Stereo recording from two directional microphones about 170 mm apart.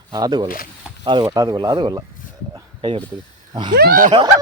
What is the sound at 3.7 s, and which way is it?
Speech, 60° right (ahead or behind).